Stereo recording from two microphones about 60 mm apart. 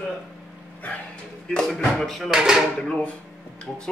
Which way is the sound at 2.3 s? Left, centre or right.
Centre.